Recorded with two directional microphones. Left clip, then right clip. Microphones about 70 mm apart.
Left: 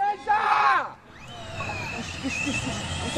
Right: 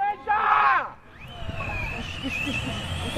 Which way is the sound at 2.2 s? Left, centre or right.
Centre.